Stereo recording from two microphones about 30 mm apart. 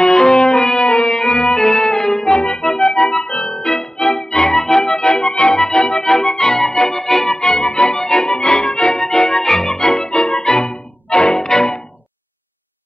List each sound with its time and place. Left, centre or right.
0.0 s music: left
1.6 s music: centre; by 3.3 s left
3.3 s music: left
3.6 s music: left
4.6 s music: centre
4.9 s accordion: left
6.0 s music: centre
6.7 s organ: left
7.2 s music: left
7.9 s music: left
8.3 s music: left
10.0 s music: left
11.4 s music: left